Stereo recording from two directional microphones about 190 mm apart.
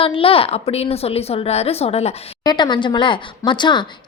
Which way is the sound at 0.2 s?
30° left (ahead or behind).